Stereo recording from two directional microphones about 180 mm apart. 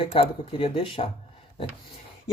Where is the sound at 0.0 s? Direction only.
30° left (ahead or behind).